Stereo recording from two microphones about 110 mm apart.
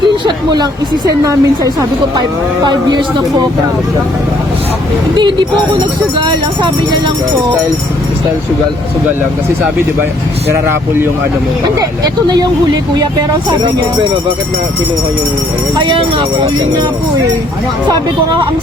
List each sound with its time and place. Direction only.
0.3 s a woman's voice: 40° right (ahead or behind)
5.1 s speech: 45° right (ahead or behind)
10.5 s speech: 20° right (ahead or behind)
15.7 s speech: 45° right (ahead or behind)